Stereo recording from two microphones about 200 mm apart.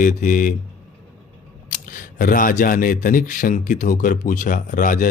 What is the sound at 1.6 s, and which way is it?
Speech, 40° left (ahead or behind).